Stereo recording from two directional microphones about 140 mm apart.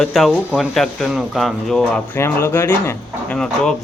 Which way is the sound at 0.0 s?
Centre (ahead or behind).